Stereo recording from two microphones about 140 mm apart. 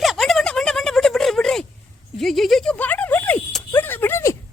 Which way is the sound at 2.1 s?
Centre (ahead or behind).